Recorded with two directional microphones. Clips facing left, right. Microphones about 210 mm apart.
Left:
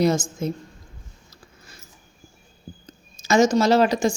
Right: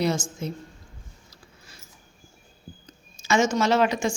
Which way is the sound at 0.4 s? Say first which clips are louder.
Left 5 dB; 45° left (ahead or behind).